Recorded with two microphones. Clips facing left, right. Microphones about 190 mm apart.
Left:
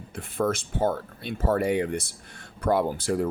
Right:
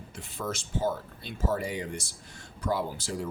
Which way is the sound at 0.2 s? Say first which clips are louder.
Left 9 dB; 55° left (ahead or behind).